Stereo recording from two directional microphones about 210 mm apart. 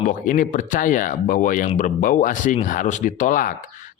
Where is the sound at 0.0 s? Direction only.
40° left (ahead or behind).